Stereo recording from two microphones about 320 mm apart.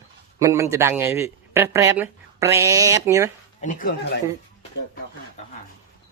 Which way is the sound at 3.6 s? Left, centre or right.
Left.